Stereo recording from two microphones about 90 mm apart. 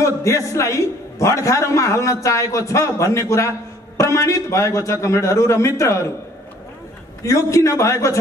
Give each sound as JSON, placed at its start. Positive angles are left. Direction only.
{"t": 0.0, "sound": "a man's voice", "side_deg": 35}
{"t": 7.2, "sound": "a man's voice", "side_deg": 35}